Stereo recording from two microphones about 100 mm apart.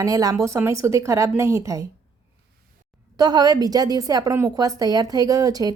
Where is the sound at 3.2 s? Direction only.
40° right (ahead or behind).